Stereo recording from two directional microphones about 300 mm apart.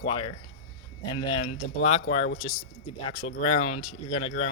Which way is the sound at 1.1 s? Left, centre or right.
Centre.